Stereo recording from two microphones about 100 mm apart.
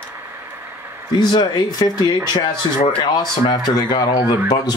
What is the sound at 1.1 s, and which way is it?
Speech, 45° left (ahead or behind).